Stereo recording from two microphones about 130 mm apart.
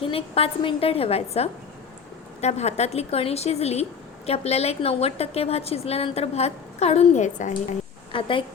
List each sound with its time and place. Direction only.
0.0 s a woman's voice: 45° left (ahead or behind); by 7.8 s 70° left (ahead or behind)
8.1 s a woman's voice: 40° left (ahead or behind)